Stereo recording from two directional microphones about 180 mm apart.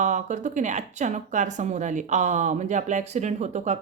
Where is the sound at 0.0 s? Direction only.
40° right (ahead or behind).